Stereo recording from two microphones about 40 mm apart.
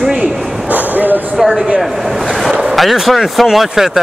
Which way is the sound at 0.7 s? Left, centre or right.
Right.